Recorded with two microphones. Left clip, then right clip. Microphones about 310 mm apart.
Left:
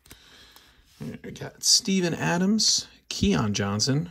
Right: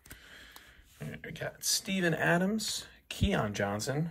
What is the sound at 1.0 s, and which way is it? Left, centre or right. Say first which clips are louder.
Speech: left 1 dB; centre.